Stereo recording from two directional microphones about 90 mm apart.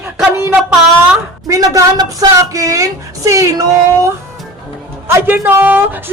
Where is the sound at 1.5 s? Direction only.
40° right (ahead or behind).